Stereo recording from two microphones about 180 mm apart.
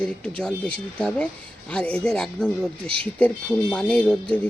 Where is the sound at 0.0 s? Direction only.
5° left (ahead or behind).